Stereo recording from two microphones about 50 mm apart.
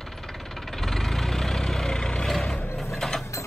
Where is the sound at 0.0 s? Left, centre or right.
Centre.